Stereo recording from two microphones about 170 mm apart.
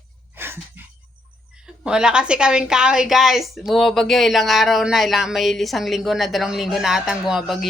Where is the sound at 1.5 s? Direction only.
5° right (ahead or behind).